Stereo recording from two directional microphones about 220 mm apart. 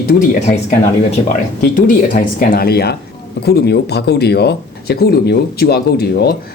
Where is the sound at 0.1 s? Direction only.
35° left (ahead or behind).